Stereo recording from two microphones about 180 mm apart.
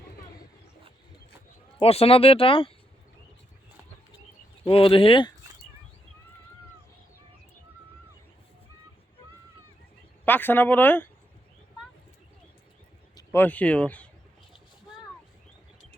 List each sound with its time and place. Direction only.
1.8 s speech: 35° left (ahead or behind)
4.6 s speech: 30° left (ahead or behind)
10.2 s speech: 10° left (ahead or behind)
13.1 s speech: 15° left (ahead or behind)